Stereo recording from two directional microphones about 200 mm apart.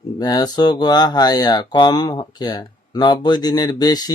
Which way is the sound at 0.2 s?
20° left (ahead or behind).